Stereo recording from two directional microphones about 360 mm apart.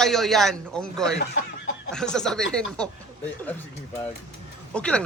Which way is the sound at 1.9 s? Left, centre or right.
Centre.